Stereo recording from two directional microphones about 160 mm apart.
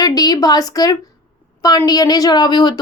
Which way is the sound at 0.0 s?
25° left (ahead or behind).